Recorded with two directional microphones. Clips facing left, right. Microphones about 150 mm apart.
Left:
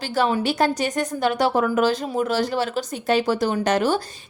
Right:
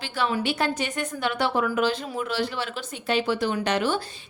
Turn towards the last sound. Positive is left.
turn(degrees=40)  # may be behind; listen again after turning